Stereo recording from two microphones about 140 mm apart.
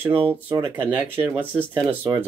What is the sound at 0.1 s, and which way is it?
Speech, 40° right (ahead or behind).